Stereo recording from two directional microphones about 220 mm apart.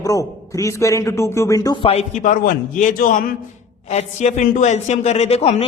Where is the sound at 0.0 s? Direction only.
15° left (ahead or behind).